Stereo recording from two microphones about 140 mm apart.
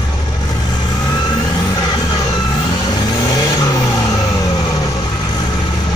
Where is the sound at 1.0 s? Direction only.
30° left (ahead or behind).